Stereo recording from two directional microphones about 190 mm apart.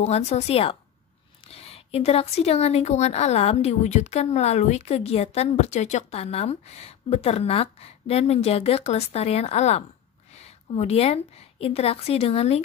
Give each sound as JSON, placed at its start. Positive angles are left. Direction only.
{"t": 0.0, "sound": "a woman's voice", "side_deg": 35}